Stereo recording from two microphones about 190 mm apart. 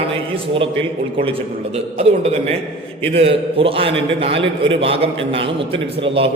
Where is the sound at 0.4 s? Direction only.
30° right (ahead or behind).